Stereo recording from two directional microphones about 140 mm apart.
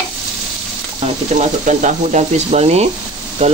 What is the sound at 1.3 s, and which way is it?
Speech, 60° right (ahead or behind).